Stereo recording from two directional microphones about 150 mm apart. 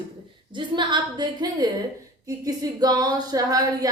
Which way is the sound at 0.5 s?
30° right (ahead or behind).